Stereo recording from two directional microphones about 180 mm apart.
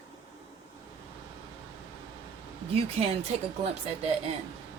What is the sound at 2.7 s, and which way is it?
Speech, 35° right (ahead or behind).